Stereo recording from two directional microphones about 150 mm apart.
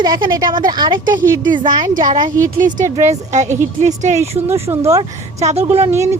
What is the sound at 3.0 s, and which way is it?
A woman's voice, 50° right (ahead or behind).